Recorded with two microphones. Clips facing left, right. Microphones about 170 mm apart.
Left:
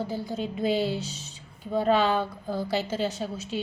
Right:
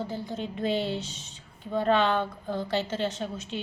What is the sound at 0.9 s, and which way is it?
Speech, 35° left (ahead or behind).